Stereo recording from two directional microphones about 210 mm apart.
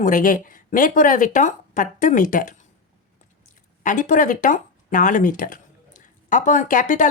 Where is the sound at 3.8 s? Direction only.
40° left (ahead or behind).